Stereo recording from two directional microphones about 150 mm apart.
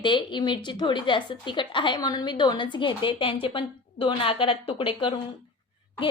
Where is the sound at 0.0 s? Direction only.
35° left (ahead or behind).